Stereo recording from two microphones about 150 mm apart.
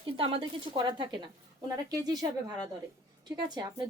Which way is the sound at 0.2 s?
35° right (ahead or behind).